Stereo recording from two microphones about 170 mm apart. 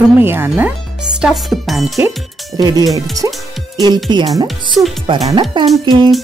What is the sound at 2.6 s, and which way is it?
Speech, 20° right (ahead or behind).